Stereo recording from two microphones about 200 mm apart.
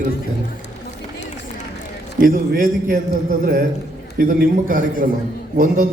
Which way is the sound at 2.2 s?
45° right (ahead or behind).